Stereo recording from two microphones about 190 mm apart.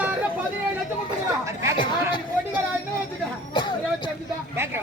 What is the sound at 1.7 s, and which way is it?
Chatter, 25° left (ahead or behind).